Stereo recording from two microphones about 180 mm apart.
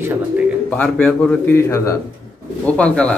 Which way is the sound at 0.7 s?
5° left (ahead or behind).